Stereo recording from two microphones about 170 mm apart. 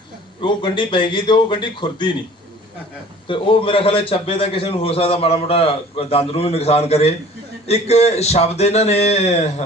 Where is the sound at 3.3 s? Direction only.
30° left (ahead or behind).